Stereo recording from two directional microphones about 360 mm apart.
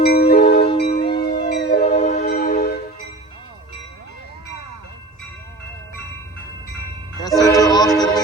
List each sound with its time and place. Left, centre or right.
0.0 s music: left
1.6 s music: centre
7.2 s music: centre